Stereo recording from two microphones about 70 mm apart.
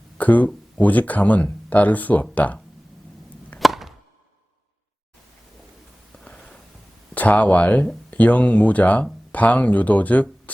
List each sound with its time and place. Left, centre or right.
0.2 s speech: left
3.6 s chop: centre
6.2 s a sound: centre
7.1 s speech: left